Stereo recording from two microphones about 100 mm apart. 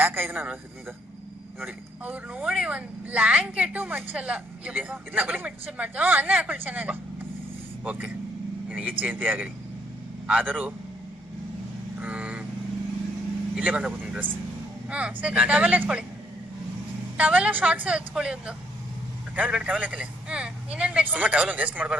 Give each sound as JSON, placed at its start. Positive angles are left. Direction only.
{"t": 0.0, "sound": "a man's voice", "side_deg": -20}
{"t": 1.5, "sound": "a woman's voice", "side_deg": -20}
{"t": 2.4, "sound": "a woman's voice", "side_deg": -5}
{"t": 11.9, "sound": "vehicle", "side_deg": -15}
{"t": 13.6, "sound": "a woman's voice", "side_deg": -15}
{"t": 17.2, "sound": "a woman's voice", "side_deg": -15}